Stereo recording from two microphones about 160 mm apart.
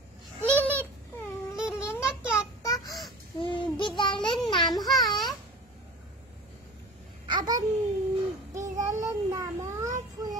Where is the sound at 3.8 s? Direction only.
30° left (ahead or behind).